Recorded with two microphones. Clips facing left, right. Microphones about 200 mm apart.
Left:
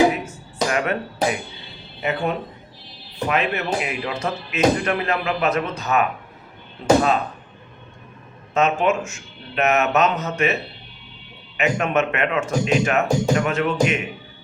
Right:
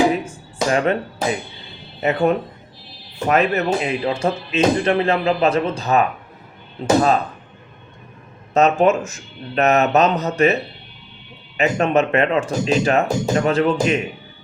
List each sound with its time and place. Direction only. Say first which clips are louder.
0.3 s a sound: right 3 dB; 30° right (ahead or behind)
2.0 s speech: right 6 dB; 40° right (ahead or behind)
8.5 s speech: right 4 dB; 40° right (ahead or behind)